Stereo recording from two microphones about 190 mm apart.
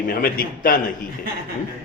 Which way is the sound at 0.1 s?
50° left (ahead or behind).